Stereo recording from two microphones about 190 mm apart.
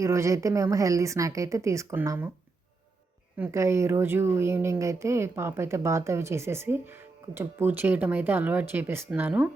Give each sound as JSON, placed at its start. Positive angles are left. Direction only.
{"t": 0.0, "sound": "speech", "side_deg": -15}
{"t": 3.3, "sound": "speech", "side_deg": -10}